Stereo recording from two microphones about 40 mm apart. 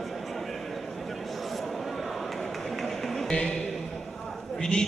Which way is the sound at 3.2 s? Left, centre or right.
Left.